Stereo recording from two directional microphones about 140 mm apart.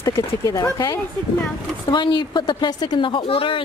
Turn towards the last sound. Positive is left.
turn(degrees=40)  # may be behind; listen again after turning